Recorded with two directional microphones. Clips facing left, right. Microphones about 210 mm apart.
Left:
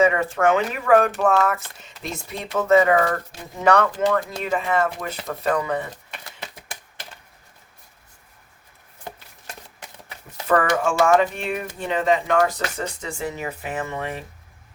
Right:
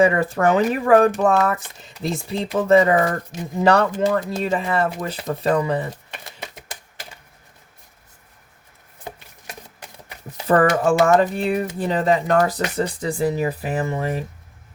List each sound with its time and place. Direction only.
0.0 s speech: 35° right (ahead or behind)
10.4 s speech: 35° right (ahead or behind)